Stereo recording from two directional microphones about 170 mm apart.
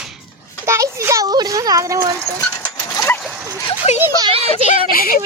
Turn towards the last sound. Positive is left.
turn(degrees=60)  # may be behind; listen again after turning